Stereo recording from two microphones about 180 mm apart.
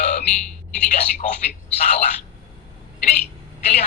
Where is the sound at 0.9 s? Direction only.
45° left (ahead or behind).